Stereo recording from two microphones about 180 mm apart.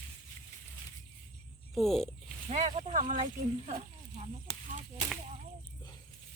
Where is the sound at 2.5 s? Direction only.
35° right (ahead or behind).